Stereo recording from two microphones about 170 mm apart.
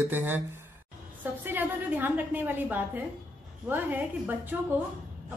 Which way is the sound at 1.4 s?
10° right (ahead or behind).